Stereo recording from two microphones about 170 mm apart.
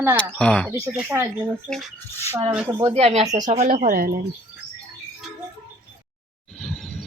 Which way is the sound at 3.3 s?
25° right (ahead or behind).